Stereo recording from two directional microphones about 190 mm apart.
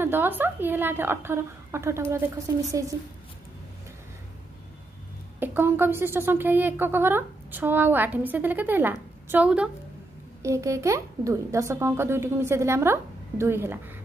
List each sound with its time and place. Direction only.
0.0 s a woman's voice: 10° right (ahead or behind)
5.4 s a woman's voice: 10° right (ahead or behind)